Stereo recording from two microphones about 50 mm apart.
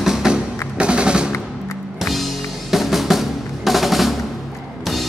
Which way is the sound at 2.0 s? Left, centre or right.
Centre.